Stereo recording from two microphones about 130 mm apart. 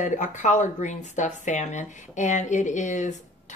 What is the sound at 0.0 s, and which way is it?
Speech, 70° left (ahead or behind).